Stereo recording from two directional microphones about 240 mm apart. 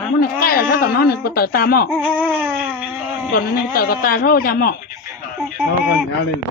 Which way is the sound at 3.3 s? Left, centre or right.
Left.